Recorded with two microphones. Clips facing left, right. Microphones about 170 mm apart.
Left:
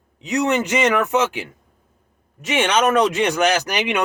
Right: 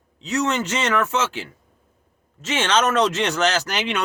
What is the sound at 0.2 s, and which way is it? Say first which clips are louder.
A man's voice: left 3 dB; 15° left (ahead or behind).